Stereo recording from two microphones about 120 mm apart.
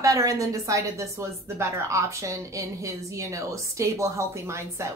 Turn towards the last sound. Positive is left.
turn(degrees=-25)  # may be behind; listen again after turning